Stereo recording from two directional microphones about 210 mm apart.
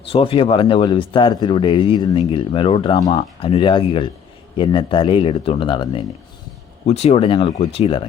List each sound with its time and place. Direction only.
0.1 s speech: 25° left (ahead or behind)